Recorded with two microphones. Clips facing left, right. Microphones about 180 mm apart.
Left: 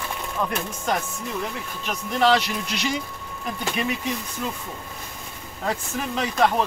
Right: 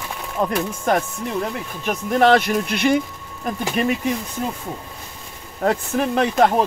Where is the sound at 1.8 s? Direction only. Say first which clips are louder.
Right 5 dB; 50° right (ahead or behind).